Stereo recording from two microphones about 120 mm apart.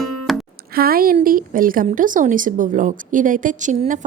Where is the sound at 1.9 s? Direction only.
90° right.